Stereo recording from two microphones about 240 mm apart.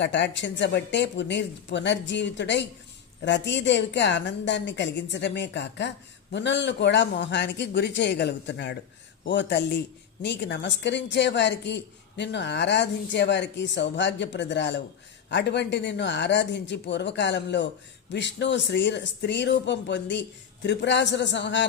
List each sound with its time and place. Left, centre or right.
0.0 s a woman's voice: left